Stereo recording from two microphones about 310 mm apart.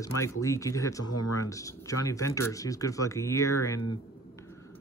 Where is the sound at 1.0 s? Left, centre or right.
Left.